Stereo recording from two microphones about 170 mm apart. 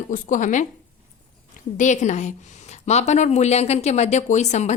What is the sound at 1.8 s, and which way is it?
A woman's voice, 45° left (ahead or behind).